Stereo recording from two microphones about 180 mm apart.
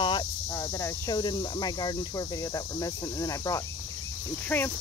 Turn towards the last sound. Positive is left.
turn(degrees=10)  # may be behind; listen again after turning